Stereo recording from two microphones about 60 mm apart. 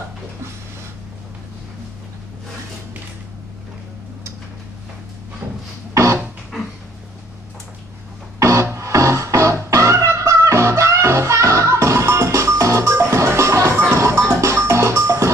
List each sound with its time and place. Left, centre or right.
8.4 s music: right